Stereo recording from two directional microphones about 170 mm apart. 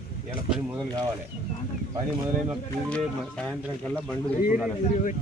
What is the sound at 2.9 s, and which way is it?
Speech, 5° left (ahead or behind).